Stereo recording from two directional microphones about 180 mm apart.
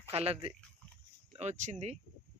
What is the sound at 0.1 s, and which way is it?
Speech, 35° right (ahead or behind).